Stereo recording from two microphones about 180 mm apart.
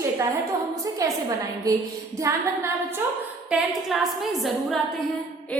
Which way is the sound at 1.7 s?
20° right (ahead or behind).